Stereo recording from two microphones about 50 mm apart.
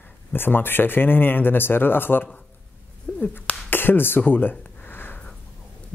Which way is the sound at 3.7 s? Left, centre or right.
Left.